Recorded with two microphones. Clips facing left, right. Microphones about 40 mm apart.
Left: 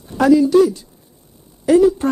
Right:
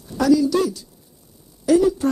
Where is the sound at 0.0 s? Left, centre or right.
Left.